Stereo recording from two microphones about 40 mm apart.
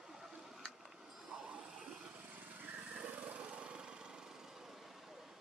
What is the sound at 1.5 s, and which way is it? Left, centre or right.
Vehicle, right.